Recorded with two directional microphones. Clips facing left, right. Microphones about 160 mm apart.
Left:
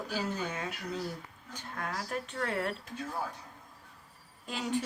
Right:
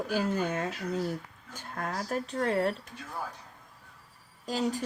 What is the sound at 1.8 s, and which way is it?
Speech, 45° right (ahead or behind).